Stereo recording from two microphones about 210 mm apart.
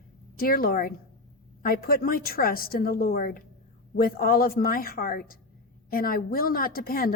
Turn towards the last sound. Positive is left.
turn(degrees=45)  # may be behind; listen again after turning